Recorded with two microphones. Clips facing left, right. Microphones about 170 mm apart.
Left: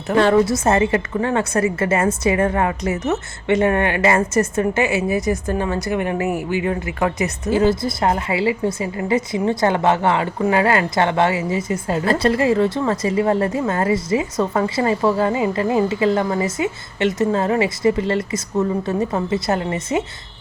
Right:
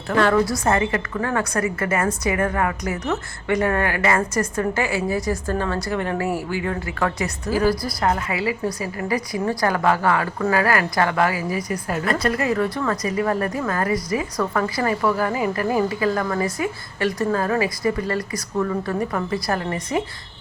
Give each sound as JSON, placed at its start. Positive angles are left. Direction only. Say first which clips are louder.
{"t": 0.1, "sound": "a woman's voice", "louder": "left 4 dB", "side_deg": 25}